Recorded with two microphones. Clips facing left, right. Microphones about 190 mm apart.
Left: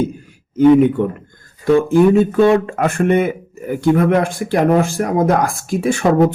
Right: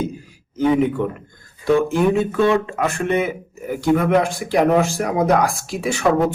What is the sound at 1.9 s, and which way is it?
Speech, 50° left (ahead or behind).